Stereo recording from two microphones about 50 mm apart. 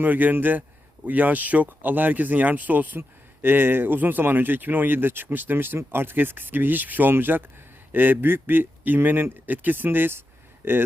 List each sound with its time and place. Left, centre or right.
0.0 s a man's voice: right